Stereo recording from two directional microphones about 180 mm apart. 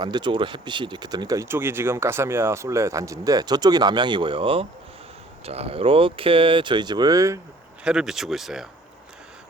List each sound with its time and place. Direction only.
0.0 s speech: 25° right (ahead or behind)
7.9 s speech: 5° right (ahead or behind)